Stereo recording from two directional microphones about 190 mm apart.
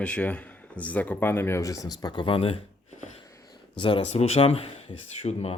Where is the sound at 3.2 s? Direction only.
20° left (ahead or behind).